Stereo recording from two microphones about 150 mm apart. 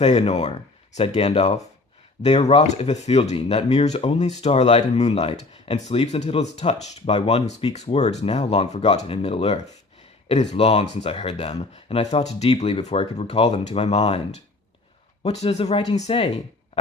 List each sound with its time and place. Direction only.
0.0 s speech: 45° left (ahead or behind)
15.2 s speech: 45° left (ahead or behind)